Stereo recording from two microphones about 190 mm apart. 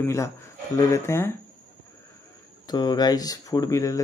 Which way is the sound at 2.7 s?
20° left (ahead or behind).